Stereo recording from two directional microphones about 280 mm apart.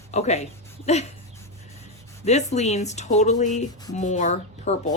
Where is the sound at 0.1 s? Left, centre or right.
Left.